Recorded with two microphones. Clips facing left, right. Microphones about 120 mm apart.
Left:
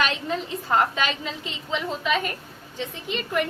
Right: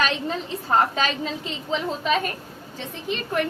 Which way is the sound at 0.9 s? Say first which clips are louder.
Right 2 dB; 35° right (ahead or behind).